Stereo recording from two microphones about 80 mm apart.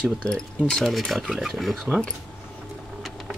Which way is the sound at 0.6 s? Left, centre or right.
Centre.